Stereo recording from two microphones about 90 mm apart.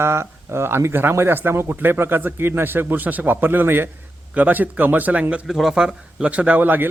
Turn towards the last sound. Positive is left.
turn(degrees=-20)  # may be behind; listen again after turning